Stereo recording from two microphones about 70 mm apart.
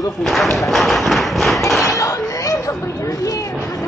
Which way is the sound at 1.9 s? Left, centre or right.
Left.